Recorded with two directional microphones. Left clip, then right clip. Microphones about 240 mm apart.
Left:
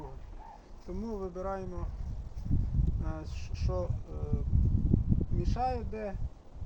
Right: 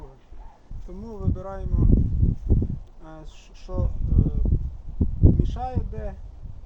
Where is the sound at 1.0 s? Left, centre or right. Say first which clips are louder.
Right 2 dB; centre.